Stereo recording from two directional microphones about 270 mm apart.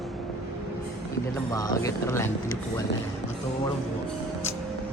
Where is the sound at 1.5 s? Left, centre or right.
Centre.